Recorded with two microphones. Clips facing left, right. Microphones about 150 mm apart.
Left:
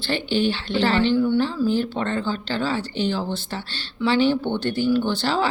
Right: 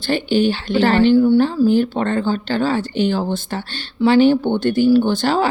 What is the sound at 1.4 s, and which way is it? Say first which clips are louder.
Speech: right 7 dB; 50° right (ahead or behind).